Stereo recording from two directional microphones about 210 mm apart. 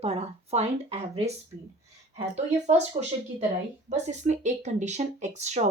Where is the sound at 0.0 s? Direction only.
30° right (ahead or behind).